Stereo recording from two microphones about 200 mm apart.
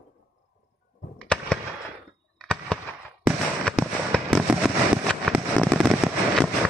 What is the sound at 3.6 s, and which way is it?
Fireworks, 5° left (ahead or behind).